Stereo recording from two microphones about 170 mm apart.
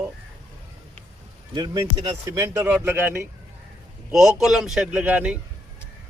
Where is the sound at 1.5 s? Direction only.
20° right (ahead or behind).